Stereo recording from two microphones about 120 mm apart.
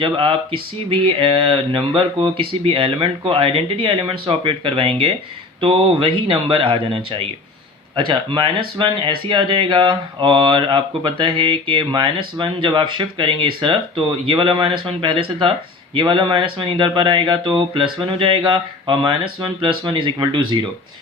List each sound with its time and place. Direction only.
0.0 s speech: 45° right (ahead or behind)